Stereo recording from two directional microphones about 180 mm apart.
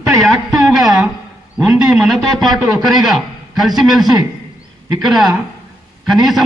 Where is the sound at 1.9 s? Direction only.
Centre (ahead or behind).